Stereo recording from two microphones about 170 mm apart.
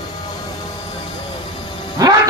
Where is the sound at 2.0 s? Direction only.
20° right (ahead or behind).